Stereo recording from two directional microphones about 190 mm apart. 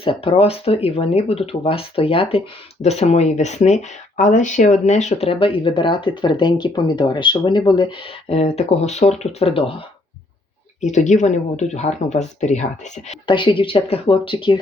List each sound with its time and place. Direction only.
0.0 s speech: 30° left (ahead or behind)
13.2 s speech: 25° left (ahead or behind)